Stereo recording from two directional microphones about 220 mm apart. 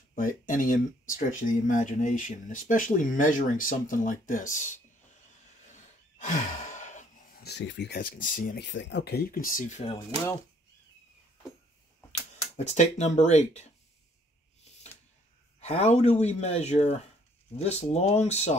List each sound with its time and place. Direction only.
0.1 s speech: 40° left (ahead or behind)
5.7 s gasp: 35° left (ahead or behind)
7.4 s speech: 50° left (ahead or behind); by 9.9 s 30° left (ahead or behind)
12.5 s speech: 30° left (ahead or behind)
15.6 s speech: 30° left (ahead or behind)